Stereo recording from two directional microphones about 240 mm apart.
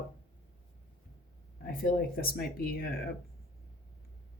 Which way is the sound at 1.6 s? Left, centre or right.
Left.